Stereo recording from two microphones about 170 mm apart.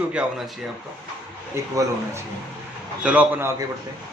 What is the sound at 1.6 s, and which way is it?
Speech, 15° right (ahead or behind).